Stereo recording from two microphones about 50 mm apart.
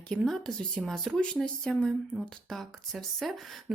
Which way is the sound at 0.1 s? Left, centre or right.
Centre.